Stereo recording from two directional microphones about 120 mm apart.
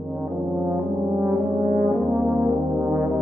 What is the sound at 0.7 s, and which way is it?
Brass instrument, 25° right (ahead or behind).